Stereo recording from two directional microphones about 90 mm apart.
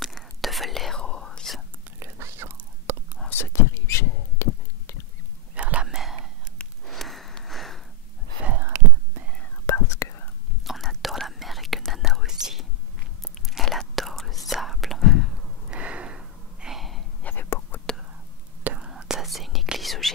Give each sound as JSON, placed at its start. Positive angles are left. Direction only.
{"t": 0.0, "sound": "whispering", "side_deg": 0}
{"t": 1.9, "sound": "whispering", "side_deg": -25}
{"t": 3.3, "sound": "whispering", "side_deg": 30}
{"t": 5.5, "sound": "whispering", "side_deg": -15}
{"t": 6.9, "sound": "a sound", "side_deg": 0}
{"t": 8.5, "sound": "a sound", "side_deg": -20}
{"t": 9.7, "sound": "whispering", "side_deg": 35}
{"t": 10.6, "sound": "whispering", "side_deg": 0}
{"t": 15.7, "sound": "snort", "side_deg": -15}
{"t": 17.2, "sound": "whispering", "side_deg": 20}
{"t": 18.6, "sound": "whispering", "side_deg": -15}
{"t": 18.9, "sound": "whispering", "side_deg": -5}